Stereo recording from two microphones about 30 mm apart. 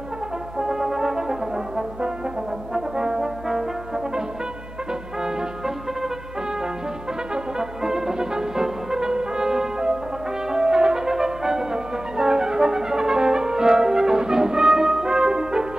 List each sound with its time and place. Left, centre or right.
0.6 s brass instrument: centre
7.3 s music: right
8.6 s brass instrument: centre